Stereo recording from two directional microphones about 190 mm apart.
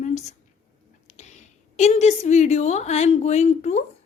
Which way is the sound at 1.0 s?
35° left (ahead or behind).